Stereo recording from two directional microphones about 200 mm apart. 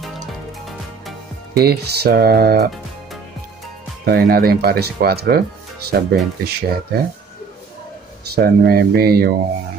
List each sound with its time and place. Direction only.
1.5 s speech: 50° right (ahead or behind)
4.0 s speech: 50° right (ahead or behind)
8.6 s speech: 50° right (ahead or behind)